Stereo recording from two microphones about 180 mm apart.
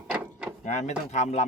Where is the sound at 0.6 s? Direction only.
40° left (ahead or behind).